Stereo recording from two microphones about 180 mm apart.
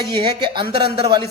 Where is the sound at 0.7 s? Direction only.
30° right (ahead or behind).